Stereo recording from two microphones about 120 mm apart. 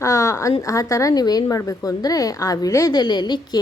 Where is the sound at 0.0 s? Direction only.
25° left (ahead or behind).